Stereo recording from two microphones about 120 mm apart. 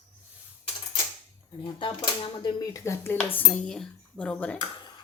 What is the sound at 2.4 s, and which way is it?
Speech, 30° left (ahead or behind).